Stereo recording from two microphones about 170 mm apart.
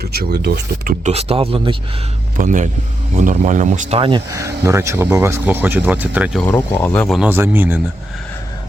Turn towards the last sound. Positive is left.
turn(degrees=-10)  # may be behind; listen again after turning